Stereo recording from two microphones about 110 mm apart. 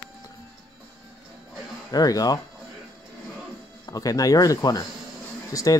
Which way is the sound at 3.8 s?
35° left (ahead or behind).